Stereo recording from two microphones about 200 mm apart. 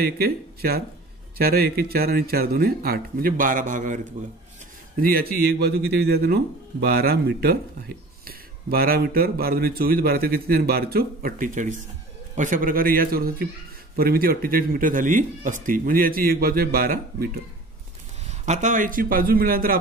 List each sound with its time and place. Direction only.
0.0 s a man's voice: 50° right (ahead or behind)
5.0 s a man's voice: 50° right (ahead or behind)
18.4 s a man's voice: 40° right (ahead or behind)